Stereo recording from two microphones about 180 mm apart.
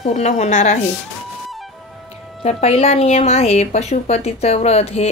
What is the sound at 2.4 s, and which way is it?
A woman's voice, 35° left (ahead or behind).